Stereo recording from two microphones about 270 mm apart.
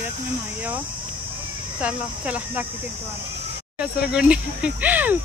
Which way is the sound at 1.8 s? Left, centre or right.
Centre.